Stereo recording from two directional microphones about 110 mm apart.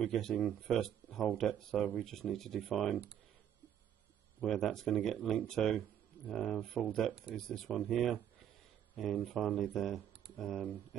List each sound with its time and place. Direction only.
0.0 s speech: 5° left (ahead or behind)
4.4 s speech: centre (ahead or behind)